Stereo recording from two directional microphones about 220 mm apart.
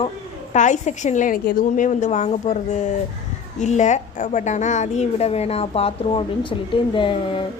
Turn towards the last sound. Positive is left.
turn(degrees=20)  # may be behind; listen again after turning